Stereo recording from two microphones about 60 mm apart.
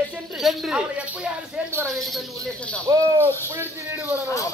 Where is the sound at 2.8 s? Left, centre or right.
Right.